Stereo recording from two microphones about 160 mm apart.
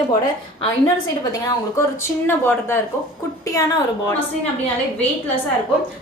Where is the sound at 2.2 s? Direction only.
15° left (ahead or behind).